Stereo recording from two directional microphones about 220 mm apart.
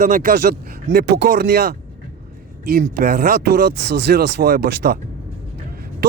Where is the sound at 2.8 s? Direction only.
45° right (ahead or behind).